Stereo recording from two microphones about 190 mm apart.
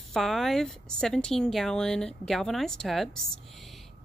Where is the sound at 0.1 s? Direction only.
Centre (ahead or behind).